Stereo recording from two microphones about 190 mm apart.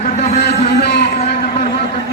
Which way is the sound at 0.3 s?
60° left (ahead or behind).